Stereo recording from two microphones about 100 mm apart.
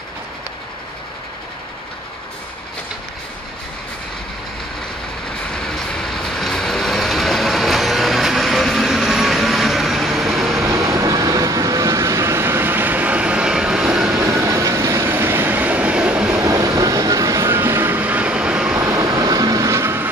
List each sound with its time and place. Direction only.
5.5 s vehicle: 5° left (ahead or behind)
10.6 s train: 30° right (ahead or behind); by 14.1 s 10° right (ahead or behind)
14.1 s train: 30° right (ahead or behind)
15.0 s train: 20° right (ahead or behind)
16.3 s vehicle: 35° right (ahead or behind); by 18.8 s 10° right (ahead or behind)
18.8 s vehicle: 35° right (ahead or behind)